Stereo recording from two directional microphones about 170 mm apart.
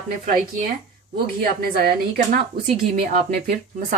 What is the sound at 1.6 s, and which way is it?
A woman's voice, 60° right (ahead or behind).